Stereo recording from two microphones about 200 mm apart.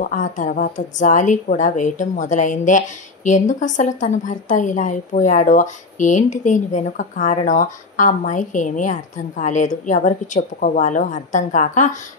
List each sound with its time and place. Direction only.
0.0 s a woman's voice: 40° left (ahead or behind)